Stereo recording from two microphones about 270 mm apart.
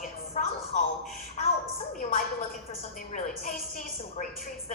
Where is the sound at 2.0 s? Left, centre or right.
Left.